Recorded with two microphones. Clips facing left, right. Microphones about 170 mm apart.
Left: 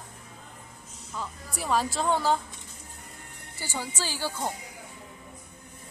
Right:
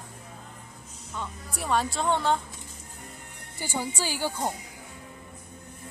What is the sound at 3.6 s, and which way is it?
Speech, 15° right (ahead or behind).